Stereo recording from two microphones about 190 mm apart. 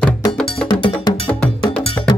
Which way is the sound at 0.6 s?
25° left (ahead or behind).